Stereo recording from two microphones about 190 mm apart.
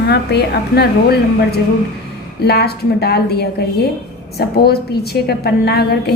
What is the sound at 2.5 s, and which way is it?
A woman's voice, 60° left (ahead or behind).